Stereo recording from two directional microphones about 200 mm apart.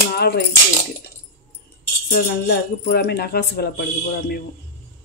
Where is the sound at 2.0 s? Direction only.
55° left (ahead or behind).